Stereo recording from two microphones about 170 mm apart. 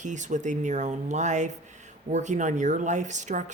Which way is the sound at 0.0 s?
45° right (ahead or behind).